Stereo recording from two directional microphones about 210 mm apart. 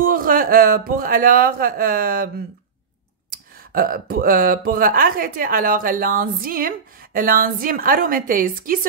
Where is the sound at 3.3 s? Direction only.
45° right (ahead or behind).